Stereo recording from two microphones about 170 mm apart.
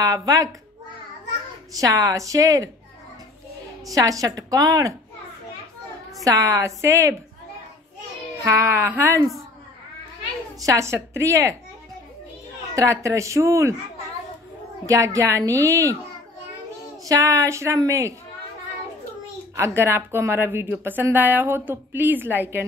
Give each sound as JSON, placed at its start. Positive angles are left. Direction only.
{"t": 0.0, "sound": "a woman's voice", "side_deg": -20}
{"t": 1.7, "sound": "a woman's voice", "side_deg": -20}
{"t": 3.9, "sound": "a woman's voice", "side_deg": -20}
{"t": 6.2, "sound": "speech", "side_deg": -20}
{"t": 8.4, "sound": "speech", "side_deg": -15}
{"t": 10.6, "sound": "speech", "side_deg": -20}
{"t": 12.7, "sound": "speech", "side_deg": -20}
{"t": 14.9, "sound": "speech", "side_deg": -20}
{"t": 17.0, "sound": "speech", "side_deg": -20}
{"t": 19.5, "sound": "speech", "side_deg": -15}